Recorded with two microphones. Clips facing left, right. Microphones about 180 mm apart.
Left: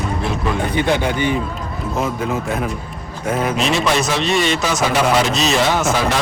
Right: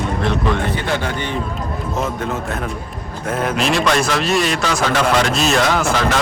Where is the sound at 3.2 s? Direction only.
5° left (ahead or behind).